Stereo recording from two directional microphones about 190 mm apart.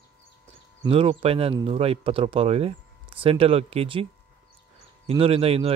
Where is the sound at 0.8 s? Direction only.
30° right (ahead or behind).